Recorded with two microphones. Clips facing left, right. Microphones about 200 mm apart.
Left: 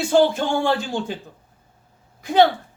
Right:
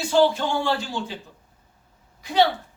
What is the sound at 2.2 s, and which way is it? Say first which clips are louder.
Speech: left 4 dB; 50° left (ahead or behind).